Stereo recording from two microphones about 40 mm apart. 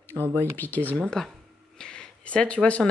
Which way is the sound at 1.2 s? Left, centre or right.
Centre.